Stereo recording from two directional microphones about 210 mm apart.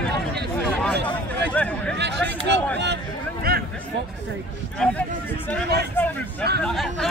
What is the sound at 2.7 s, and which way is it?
Speech, 55° right (ahead or behind).